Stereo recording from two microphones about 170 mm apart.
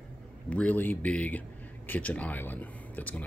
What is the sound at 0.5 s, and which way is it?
Speech, 10° left (ahead or behind).